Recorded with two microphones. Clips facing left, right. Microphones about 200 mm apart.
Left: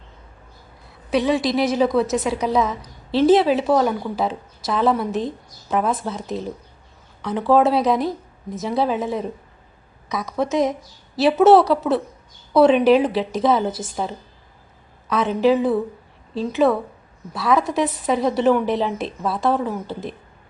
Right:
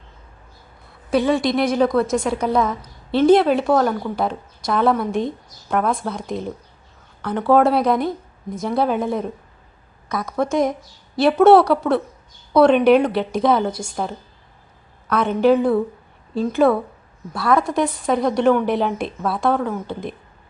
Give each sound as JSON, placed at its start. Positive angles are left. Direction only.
{"t": 1.1, "sound": "a woman's voice", "side_deg": 0}